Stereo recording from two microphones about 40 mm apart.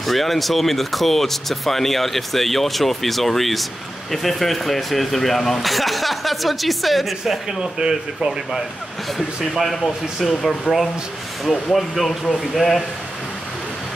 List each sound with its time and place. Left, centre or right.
0.0 s speech: centre
7.8 s speech: centre
9.5 s speech: centre